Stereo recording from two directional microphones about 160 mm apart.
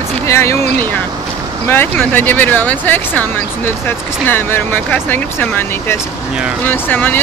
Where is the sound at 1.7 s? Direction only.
15° left (ahead or behind).